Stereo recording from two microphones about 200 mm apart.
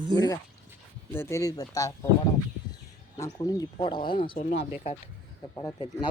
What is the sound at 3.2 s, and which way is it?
Speech, 15° left (ahead or behind).